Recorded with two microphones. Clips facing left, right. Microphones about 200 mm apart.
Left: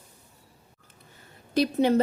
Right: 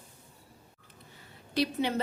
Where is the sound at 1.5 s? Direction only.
45° left (ahead or behind).